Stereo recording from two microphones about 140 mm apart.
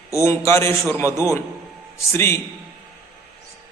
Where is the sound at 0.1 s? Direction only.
20° left (ahead or behind).